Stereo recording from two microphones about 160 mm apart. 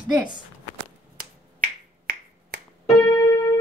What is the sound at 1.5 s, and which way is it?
Finger snapping, 60° right (ahead or behind).